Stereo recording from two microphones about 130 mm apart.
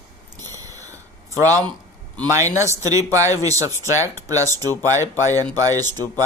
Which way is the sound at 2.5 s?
25° right (ahead or behind).